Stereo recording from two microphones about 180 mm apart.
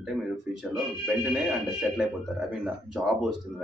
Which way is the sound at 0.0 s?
Centre (ahead or behind).